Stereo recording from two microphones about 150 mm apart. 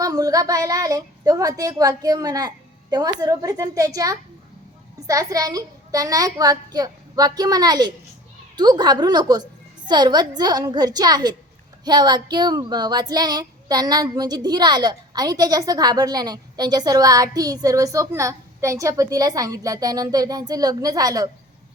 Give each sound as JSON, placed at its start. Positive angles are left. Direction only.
{"t": 0.0, "sound": "speech", "side_deg": -25}